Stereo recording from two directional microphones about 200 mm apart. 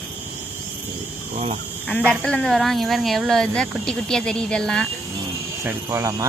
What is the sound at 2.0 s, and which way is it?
Speech, 5° left (ahead or behind).